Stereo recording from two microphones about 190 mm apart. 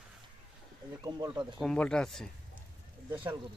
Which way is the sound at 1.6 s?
5° left (ahead or behind).